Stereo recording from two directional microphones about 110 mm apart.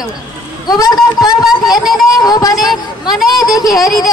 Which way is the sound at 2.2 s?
35° left (ahead or behind).